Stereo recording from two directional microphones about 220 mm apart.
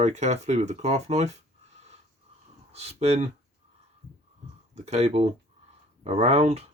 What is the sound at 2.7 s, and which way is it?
Speech, 30° right (ahead or behind).